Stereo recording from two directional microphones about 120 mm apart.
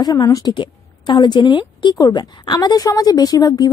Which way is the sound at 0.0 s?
30° left (ahead or behind).